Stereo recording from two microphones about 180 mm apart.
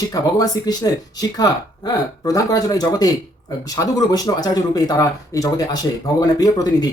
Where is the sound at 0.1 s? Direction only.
20° left (ahead or behind).